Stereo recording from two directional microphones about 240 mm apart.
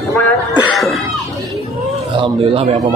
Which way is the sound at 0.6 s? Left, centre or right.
Centre.